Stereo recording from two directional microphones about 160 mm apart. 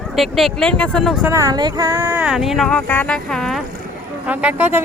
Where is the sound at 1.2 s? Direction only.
20° right (ahead or behind); by 3.6 s centre (ahead or behind).